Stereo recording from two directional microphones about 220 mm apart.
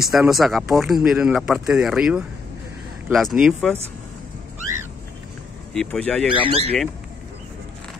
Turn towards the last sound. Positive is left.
turn(degrees=-25)  # may be behind; listen again after turning